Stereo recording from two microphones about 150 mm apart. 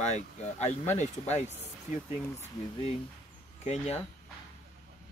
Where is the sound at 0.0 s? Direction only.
50° left (ahead or behind).